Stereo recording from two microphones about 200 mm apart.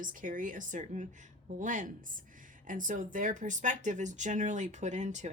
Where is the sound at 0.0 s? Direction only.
40° right (ahead or behind).